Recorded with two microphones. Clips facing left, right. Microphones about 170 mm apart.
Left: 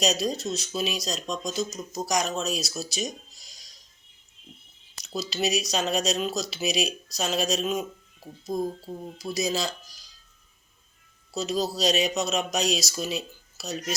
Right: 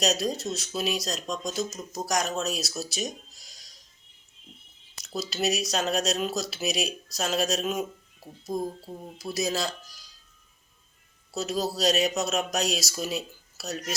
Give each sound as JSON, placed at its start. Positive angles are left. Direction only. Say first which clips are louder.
{"t": 0.0, "sound": "speech", "louder": "left 1 dB", "side_deg": 0}
{"t": 4.9, "sound": "speech", "louder": "left 1 dB", "side_deg": -5}
{"t": 9.1, "sound": "speech", "louder": "left 1 dB", "side_deg": -5}
{"t": 11.3, "sound": "speech", "louder": "left 1 dB", "side_deg": -5}